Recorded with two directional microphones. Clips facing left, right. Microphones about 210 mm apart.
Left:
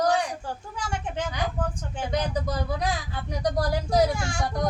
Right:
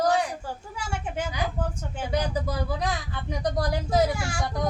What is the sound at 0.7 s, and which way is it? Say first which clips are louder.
Speech: even; 10° right (ahead or behind).